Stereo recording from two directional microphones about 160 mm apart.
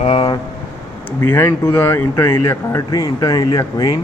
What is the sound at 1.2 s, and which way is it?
Speech, 15° left (ahead or behind).